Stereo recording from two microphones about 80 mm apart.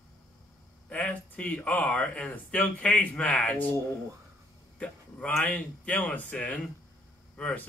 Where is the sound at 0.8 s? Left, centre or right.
Centre.